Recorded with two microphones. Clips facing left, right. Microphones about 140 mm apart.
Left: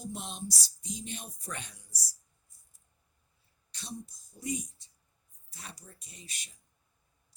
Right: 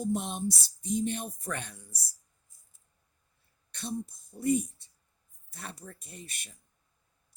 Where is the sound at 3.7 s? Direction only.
55° right (ahead or behind).